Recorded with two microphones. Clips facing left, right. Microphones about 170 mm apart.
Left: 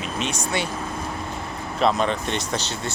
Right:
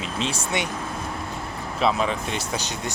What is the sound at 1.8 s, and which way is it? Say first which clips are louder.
Speech: left 2 dB; 5° right (ahead or behind).